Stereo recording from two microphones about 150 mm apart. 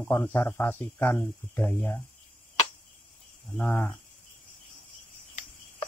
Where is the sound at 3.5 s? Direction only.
10° left (ahead or behind).